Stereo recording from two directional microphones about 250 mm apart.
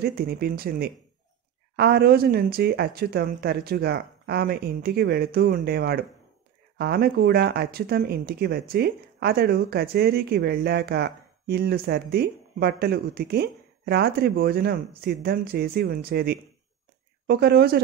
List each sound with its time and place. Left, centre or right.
0.0 s speech: right